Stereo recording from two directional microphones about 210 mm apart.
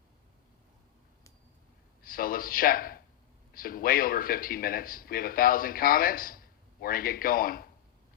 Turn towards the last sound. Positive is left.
turn(degrees=45)  # may be behind; listen again after turning